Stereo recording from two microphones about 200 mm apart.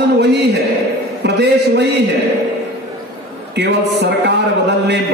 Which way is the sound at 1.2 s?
60° right (ahead or behind).